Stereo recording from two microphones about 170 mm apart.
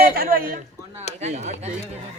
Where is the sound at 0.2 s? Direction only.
55° right (ahead or behind).